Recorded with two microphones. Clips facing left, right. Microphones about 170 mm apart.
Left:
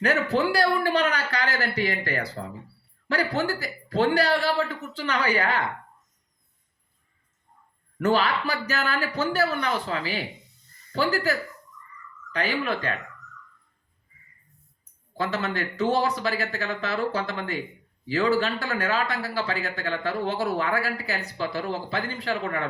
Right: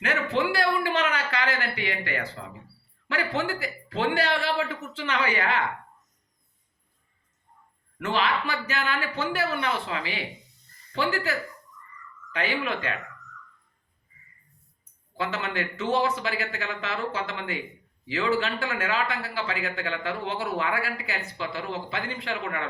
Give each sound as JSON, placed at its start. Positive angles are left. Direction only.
{"t": 0.0, "sound": "speech", "side_deg": 40}
{"t": 7.9, "sound": "speech", "side_deg": 40}
{"t": 15.2, "sound": "speech", "side_deg": 40}